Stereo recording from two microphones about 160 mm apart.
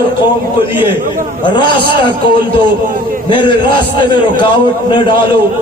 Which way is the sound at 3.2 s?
30° left (ahead or behind).